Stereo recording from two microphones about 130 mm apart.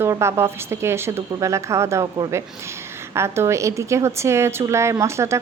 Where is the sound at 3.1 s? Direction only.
20° right (ahead or behind).